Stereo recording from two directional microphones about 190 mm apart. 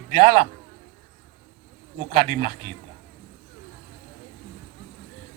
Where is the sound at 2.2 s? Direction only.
40° right (ahead or behind).